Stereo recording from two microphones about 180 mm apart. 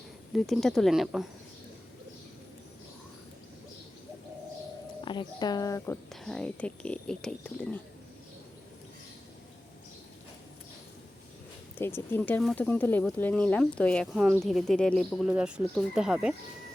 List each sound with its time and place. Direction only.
0.3 s speech: centre (ahead or behind)
5.0 s speech: 25° left (ahead or behind)
6.2 s speech: 5° left (ahead or behind)
11.8 s speech: 10° left (ahead or behind); by 16.3 s 5° right (ahead or behind)